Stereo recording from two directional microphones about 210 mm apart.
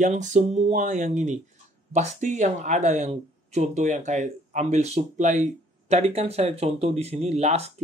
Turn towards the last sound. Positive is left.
turn(degrees=-30)  # may be behind; listen again after turning